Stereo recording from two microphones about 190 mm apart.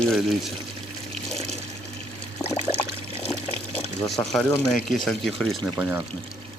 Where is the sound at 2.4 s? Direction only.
5° left (ahead or behind).